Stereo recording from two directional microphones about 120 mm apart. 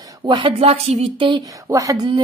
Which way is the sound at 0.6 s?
55° right (ahead or behind).